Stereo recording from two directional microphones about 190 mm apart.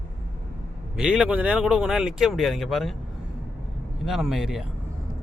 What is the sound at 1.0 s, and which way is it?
Speech, 5° right (ahead or behind).